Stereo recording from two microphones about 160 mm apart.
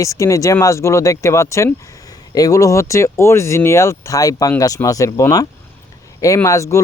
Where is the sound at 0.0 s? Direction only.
20° left (ahead or behind).